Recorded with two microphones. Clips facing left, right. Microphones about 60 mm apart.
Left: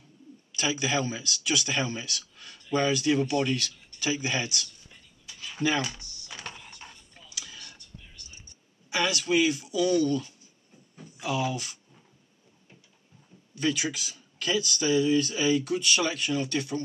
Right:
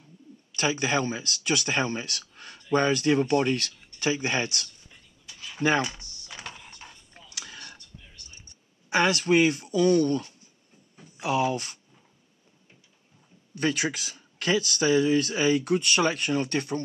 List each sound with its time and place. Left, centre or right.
0.6 s speech: right
6.4 s music: centre
7.2 s a sound: right
8.9 s speech: right
13.6 s speech: right